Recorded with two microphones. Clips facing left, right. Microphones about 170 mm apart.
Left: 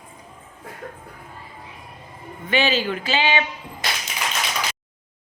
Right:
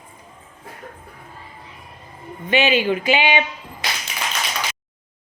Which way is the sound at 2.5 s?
20° right (ahead or behind).